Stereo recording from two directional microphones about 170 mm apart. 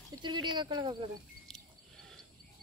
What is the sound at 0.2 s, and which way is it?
Speech, 25° right (ahead or behind).